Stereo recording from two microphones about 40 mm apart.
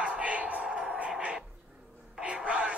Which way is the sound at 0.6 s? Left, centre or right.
Centre.